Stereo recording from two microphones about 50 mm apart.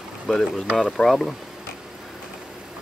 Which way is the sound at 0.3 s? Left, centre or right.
Centre.